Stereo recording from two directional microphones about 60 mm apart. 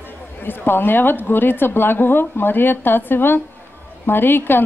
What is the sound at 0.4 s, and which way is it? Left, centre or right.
A woman's voice, left.